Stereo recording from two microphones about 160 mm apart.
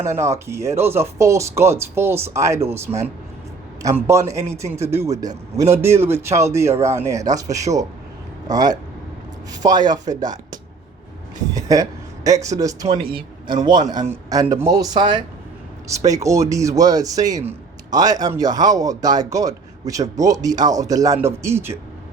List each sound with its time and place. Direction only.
0.0 s speech: 15° right (ahead or behind)
2.8 s a man's voice: 45° right (ahead or behind)
3.8 s speech: 15° right (ahead or behind)
5.0 s a man's voice: 50° right (ahead or behind)
5.5 s a man's voice: 15° right (ahead or behind)
14.1 s speech: 20° right (ahead or behind)